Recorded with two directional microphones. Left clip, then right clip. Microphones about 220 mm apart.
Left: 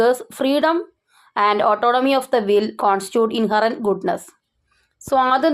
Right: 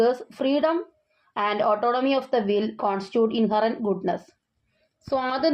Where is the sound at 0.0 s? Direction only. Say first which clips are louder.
Left 5 dB; 25° left (ahead or behind).